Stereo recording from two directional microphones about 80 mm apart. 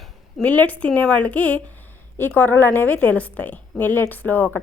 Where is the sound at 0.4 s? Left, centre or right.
Centre.